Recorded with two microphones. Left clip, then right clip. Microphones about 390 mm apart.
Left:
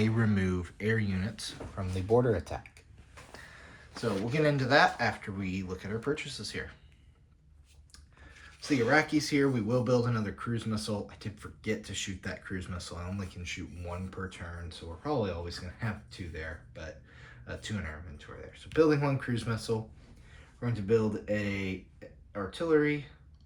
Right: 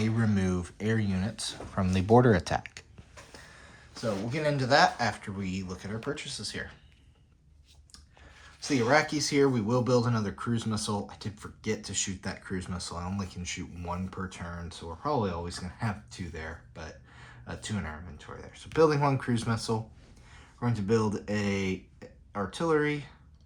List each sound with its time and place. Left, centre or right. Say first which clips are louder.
0.0 s speech: even; centre
2.0 s speech: right 4 dB; right
3.3 s speech: left 1 dB; centre
8.6 s speech: right 2 dB; centre